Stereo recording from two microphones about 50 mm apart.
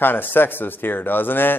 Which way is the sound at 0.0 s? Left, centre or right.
Left.